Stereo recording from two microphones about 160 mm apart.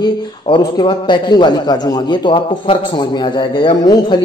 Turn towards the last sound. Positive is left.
turn(degrees=30)  # may be behind; listen again after turning